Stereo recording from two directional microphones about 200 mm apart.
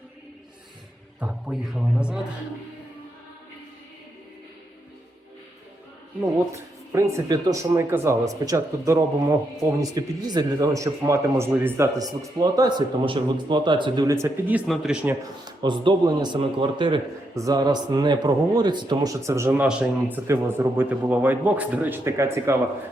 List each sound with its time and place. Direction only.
1.2 s a man's voice: 5° right (ahead or behind)
6.5 s a man's voice: 15° right (ahead or behind)
15.4 s a man's voice: 25° right (ahead or behind)